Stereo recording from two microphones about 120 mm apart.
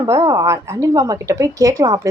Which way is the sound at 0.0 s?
25° right (ahead or behind).